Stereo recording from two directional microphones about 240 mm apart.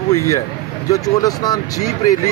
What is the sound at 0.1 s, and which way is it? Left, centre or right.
Speech, centre.